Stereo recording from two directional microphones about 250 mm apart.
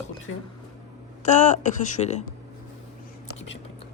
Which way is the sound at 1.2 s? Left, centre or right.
Left.